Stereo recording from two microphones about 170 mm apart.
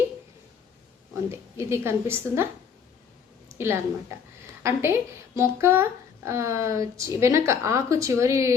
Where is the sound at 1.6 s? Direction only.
15° right (ahead or behind).